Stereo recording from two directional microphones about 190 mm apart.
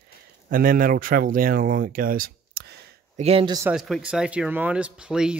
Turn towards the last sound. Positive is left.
turn(degrees=-5)  # may be behind; listen again after turning